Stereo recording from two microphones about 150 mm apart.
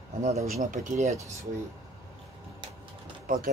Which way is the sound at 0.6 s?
45° right (ahead or behind).